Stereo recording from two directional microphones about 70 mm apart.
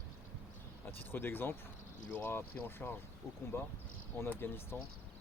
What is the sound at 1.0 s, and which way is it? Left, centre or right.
Speech, left.